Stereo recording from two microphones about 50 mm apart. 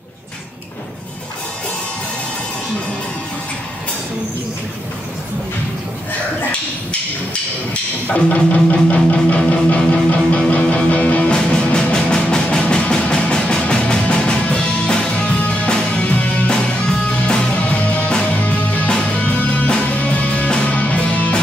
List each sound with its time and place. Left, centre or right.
8.1 s music: left
11.2 s music: centre
16.4 s music: centre
17.6 s music: left